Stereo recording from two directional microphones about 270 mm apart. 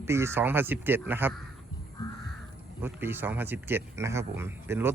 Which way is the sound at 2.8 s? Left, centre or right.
Centre.